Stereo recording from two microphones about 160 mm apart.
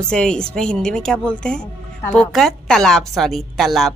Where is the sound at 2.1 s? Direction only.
Centre (ahead or behind).